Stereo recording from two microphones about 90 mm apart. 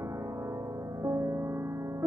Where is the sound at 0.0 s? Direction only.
35° right (ahead or behind).